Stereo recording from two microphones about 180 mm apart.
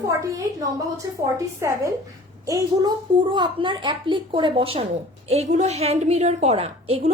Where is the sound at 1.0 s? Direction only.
15° right (ahead or behind).